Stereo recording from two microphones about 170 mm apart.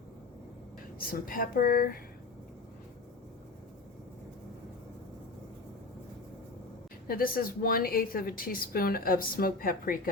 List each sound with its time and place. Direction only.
0.9 s a woman's voice: 55° left (ahead or behind)
7.1 s a woman's voice: 60° left (ahead or behind)